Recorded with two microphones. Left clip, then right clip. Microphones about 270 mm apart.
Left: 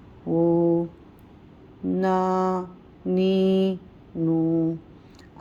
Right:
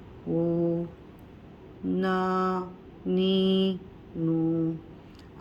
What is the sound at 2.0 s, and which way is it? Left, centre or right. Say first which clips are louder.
Mantra: left 5 dB; left.